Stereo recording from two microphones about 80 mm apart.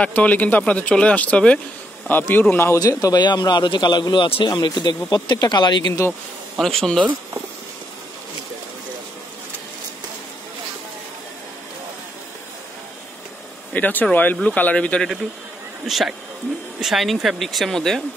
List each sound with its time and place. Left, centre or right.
0.0 s a man's voice: centre
2.8 s a man's voice: left
3.2 s speech: left
6.6 s speech: centre
13.7 s a man's voice: left
15.9 s speech: centre